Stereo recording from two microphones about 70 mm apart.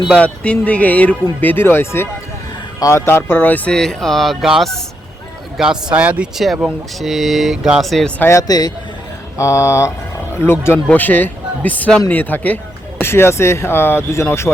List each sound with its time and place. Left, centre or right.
0.2 s speech: centre
3.7 s speech: centre
5.9 s speech: centre
6.3 s speech: centre
8.4 s a man's voice: left
9.4 s speech: left
10.9 s speech: left
11.9 s speech: centre
12.1 s speech: left
13.0 s speech: left